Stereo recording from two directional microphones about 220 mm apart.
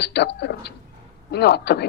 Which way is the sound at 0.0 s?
50° left (ahead or behind).